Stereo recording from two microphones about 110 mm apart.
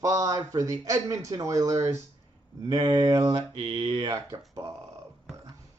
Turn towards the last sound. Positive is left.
turn(degrees=-30)  # may be behind; listen again after turning